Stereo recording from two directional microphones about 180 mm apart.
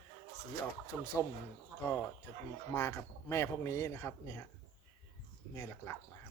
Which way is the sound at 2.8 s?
10° left (ahead or behind).